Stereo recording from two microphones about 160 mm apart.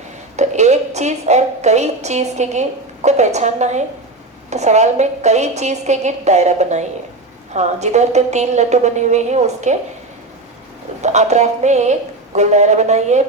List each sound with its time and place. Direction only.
0.3 s a woman's voice: 45° right (ahead or behind)
11.0 s a woman's voice: 45° right (ahead or behind)